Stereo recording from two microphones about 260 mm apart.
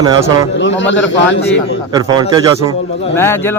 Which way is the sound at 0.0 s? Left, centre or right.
Centre.